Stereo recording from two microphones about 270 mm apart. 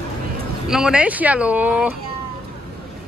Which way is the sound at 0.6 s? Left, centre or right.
Centre.